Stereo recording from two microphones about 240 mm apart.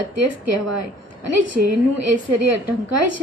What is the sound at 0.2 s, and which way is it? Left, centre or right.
A woman's voice, right.